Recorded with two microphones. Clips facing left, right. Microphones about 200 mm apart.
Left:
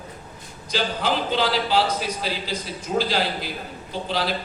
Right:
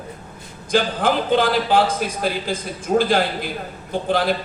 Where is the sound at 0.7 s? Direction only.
50° right (ahead or behind).